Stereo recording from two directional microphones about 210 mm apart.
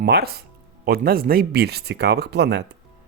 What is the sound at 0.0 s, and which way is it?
Speech, 50° right (ahead or behind).